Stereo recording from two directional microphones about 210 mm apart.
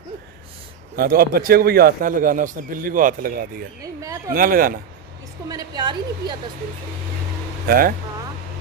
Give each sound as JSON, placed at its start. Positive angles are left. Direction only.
{"t": 0.9, "sound": "a man's voice", "side_deg": -45}
{"t": 3.8, "sound": "a woman's voice", "side_deg": -15}
{"t": 4.3, "sound": "a man's voice", "side_deg": -45}
{"t": 5.5, "sound": "a woman's voice", "side_deg": -20}
{"t": 7.6, "sound": "speech", "side_deg": -45}